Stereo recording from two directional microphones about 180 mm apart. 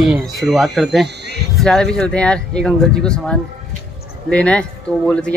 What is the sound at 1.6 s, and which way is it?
A man's voice, 5° left (ahead or behind).